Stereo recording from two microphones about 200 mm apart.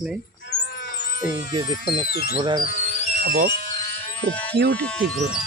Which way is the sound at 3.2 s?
45° right (ahead or behind).